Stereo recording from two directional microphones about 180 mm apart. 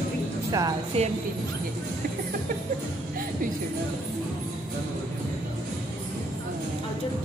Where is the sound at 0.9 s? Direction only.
35° right (ahead or behind).